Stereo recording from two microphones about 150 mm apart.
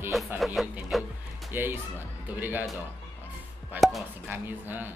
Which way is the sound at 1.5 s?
15° right (ahead or behind).